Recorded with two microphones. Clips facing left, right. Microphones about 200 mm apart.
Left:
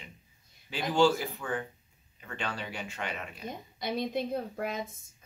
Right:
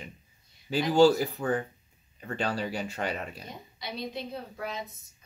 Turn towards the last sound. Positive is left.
turn(degrees=50)  # may be behind; listen again after turning